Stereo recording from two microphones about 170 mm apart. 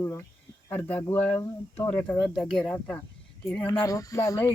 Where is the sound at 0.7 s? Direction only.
10° left (ahead or behind).